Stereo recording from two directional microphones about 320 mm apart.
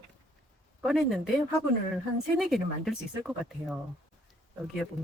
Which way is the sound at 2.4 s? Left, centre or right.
Centre.